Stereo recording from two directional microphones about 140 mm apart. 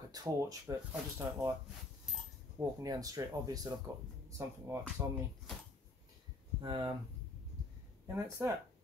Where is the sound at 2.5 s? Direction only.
25° right (ahead or behind).